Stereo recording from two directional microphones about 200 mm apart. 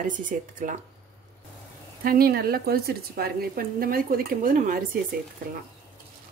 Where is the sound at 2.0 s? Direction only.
45° right (ahead or behind).